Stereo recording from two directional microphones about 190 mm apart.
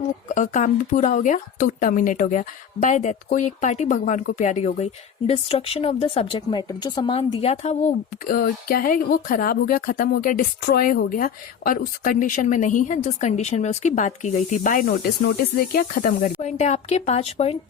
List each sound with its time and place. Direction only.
0.3 s speech: 40° left (ahead or behind)
16.4 s speech: 35° left (ahead or behind)